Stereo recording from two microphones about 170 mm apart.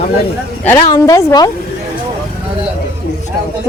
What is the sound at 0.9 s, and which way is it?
Speech, 20° left (ahead or behind).